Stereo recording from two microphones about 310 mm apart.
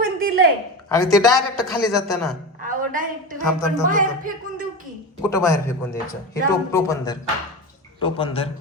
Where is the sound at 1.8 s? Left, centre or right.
Centre.